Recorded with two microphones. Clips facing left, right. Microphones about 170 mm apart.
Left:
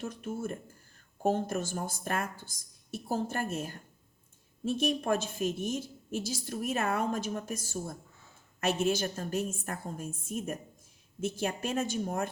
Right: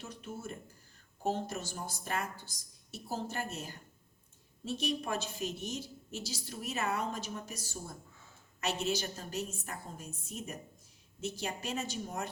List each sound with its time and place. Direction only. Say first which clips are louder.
0.0 s a woman's voice: left 7 dB; 50° left (ahead or behind)